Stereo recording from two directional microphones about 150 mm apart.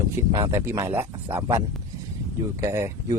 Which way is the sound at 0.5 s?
15° right (ahead or behind).